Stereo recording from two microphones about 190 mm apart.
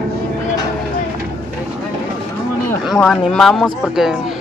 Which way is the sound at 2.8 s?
Centre (ahead or behind).